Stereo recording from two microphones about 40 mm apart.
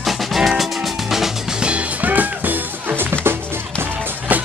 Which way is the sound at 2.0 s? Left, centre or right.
Right.